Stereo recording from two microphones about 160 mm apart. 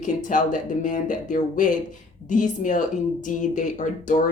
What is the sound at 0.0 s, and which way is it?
Speech, 50° left (ahead or behind).